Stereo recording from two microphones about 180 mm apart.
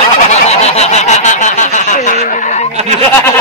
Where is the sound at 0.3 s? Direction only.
35° left (ahead or behind).